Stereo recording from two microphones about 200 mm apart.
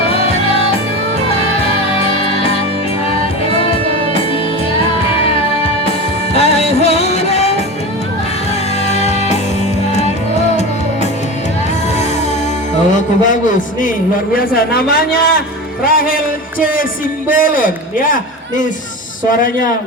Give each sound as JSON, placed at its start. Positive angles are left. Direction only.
{"t": 2.2, "sound": "music", "side_deg": 30}
{"t": 6.3, "sound": "music", "side_deg": 30}
{"t": 8.9, "sound": "music", "side_deg": 35}
{"t": 12.9, "sound": "a man's voice", "side_deg": 40}